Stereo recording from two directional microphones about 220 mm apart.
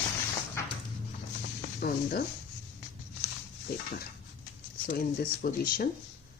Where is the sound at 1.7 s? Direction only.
45° left (ahead or behind).